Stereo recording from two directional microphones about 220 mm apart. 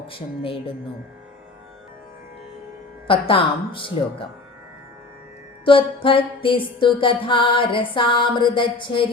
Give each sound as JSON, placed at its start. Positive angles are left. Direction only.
{"t": 0.1, "sound": "music", "side_deg": 25}
{"t": 3.1, "sound": "music", "side_deg": 25}
{"t": 5.6, "sound": "music", "side_deg": 25}